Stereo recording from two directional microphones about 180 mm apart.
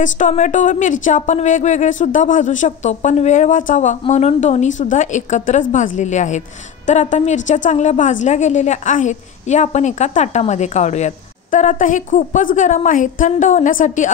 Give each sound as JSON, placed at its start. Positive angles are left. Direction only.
{"t": 0.0, "sound": "a woman's voice", "side_deg": 45}